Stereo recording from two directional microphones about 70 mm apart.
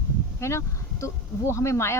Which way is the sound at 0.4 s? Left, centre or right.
Left.